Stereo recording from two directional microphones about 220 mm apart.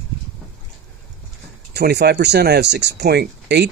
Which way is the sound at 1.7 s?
50° right (ahead or behind).